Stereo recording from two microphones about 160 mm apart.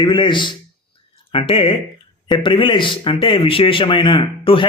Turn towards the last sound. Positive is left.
turn(degrees=35)  # may be behind; listen again after turning